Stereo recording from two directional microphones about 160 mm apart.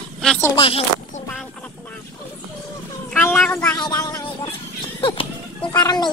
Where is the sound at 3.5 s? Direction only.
15° left (ahead or behind).